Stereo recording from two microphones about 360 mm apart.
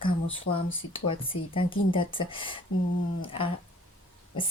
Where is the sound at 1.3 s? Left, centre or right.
Left.